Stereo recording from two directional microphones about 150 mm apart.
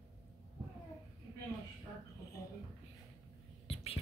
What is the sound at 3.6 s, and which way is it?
Whispering, 40° left (ahead or behind).